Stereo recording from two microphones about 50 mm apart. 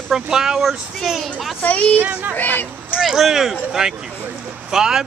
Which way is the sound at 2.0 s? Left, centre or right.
Right.